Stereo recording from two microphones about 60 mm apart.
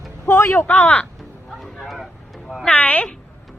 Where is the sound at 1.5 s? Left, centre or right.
Centre.